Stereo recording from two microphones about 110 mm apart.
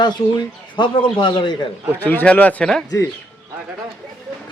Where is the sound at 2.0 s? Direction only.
15° left (ahead or behind).